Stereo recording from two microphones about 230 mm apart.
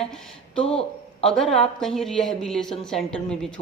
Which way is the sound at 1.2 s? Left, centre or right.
Centre.